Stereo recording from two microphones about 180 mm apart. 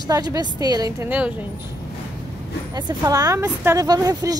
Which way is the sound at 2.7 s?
20° right (ahead or behind).